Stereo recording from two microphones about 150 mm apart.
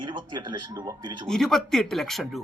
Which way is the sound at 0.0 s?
30° right (ahead or behind).